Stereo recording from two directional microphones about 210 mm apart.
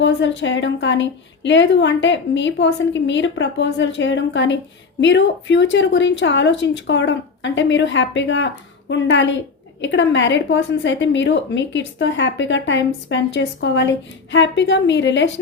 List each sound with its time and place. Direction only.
0.0 s a woman's voice: 60° left (ahead or behind)